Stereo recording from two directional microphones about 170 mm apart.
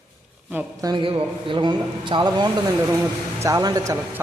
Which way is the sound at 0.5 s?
20° right (ahead or behind).